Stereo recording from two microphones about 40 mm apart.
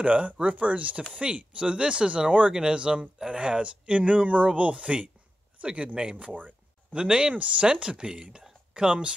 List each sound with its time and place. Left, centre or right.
0.0 s speech: right
7.3 s speech: right
7.6 s speech: centre